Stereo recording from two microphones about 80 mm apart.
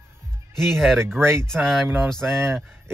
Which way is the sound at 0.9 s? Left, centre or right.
Right.